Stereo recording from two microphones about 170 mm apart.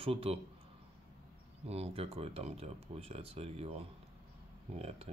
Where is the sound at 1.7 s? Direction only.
35° right (ahead or behind).